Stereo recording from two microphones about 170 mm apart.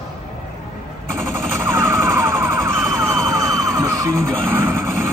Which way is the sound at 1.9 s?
20° right (ahead or behind).